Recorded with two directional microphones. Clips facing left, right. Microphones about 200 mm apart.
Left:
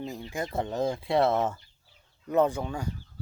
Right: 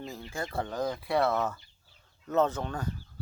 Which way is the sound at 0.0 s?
15° left (ahead or behind).